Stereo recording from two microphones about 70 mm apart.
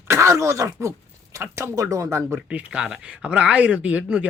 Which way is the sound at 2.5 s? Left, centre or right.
Centre.